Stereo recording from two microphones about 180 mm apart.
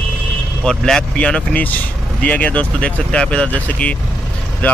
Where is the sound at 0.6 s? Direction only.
5° left (ahead or behind).